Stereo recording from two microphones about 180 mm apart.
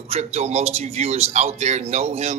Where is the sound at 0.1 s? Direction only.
35° right (ahead or behind).